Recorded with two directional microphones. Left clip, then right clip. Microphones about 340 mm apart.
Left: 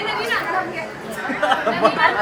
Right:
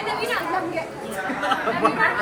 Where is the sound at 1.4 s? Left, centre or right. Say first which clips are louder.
Left 4 dB; left.